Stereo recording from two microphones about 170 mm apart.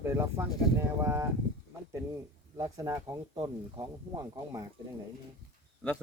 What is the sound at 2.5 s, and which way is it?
Speech, 20° right (ahead or behind).